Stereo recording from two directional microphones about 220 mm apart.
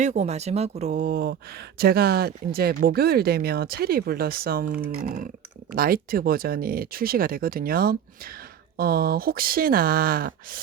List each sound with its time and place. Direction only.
0.0 s speech: 30° right (ahead or behind)